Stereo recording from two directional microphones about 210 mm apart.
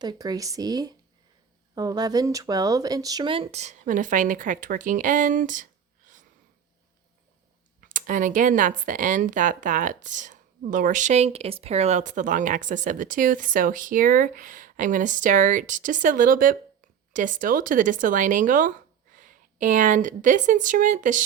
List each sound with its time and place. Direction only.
0.0 s a woman's voice: 20° right (ahead or behind); by 5.6 s 40° right (ahead or behind)
7.8 s a woman's voice: 40° right (ahead or behind)